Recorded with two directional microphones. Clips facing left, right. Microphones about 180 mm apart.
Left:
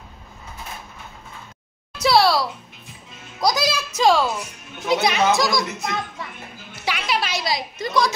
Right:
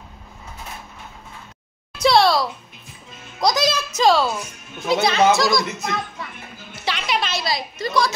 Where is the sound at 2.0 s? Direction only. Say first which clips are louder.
Right 1 dB; 5° left (ahead or behind).